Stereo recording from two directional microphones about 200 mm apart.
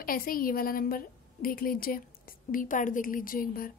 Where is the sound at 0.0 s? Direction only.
45° left (ahead or behind).